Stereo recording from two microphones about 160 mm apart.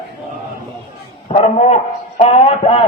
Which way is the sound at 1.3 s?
40° left (ahead or behind).